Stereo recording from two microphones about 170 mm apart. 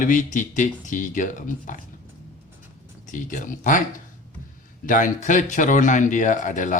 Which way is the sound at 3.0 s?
50° left (ahead or behind).